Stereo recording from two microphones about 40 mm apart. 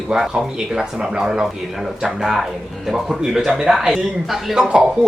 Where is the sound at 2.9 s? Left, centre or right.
Centre.